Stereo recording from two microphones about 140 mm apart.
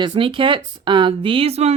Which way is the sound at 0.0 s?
40° right (ahead or behind).